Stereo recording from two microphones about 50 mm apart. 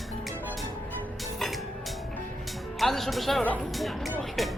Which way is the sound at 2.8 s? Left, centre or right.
Centre.